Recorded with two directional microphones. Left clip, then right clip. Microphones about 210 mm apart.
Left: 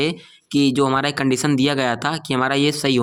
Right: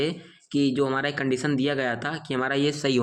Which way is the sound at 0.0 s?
40° left (ahead or behind).